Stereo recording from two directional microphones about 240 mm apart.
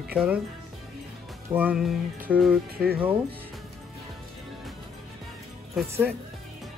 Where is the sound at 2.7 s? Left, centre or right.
Right.